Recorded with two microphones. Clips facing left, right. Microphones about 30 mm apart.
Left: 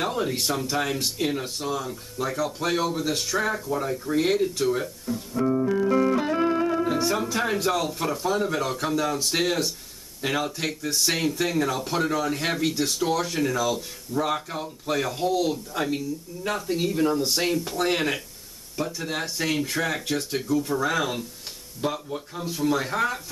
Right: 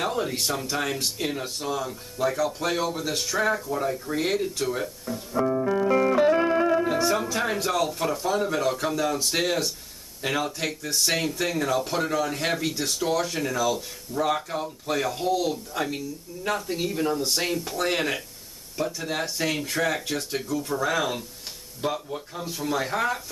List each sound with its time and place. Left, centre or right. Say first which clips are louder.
0.0 s speech: left 1 dB; centre
5.3 s music: even; centre
6.8 s speech: right 1 dB; centre